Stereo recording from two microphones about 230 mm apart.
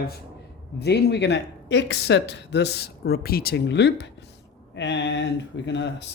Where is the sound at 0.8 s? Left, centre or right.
Left.